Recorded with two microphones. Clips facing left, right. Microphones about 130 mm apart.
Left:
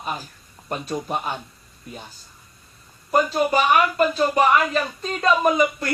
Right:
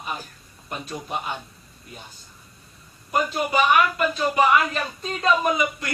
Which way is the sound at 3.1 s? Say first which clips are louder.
Left 3 dB; 40° left (ahead or behind).